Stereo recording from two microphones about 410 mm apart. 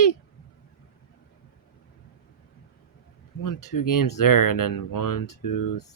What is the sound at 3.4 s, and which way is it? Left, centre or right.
Speech, left.